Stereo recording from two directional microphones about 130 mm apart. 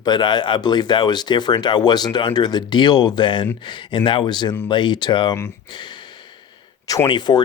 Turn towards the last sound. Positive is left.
turn(degrees=35)  # may be behind; listen again after turning